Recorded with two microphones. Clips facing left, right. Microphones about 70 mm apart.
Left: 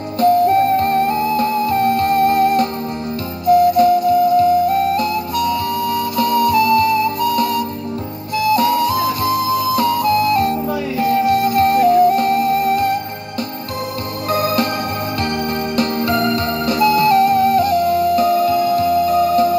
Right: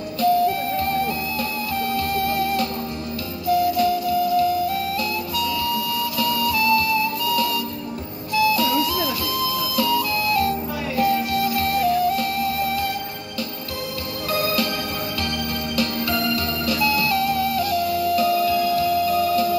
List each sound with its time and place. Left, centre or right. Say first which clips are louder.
0.2 s music: left 7 dB; left
14.3 s music: left 6 dB; left
15.7 s music: left 6 dB; left